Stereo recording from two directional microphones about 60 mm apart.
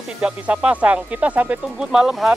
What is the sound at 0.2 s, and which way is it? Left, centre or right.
Speech, centre.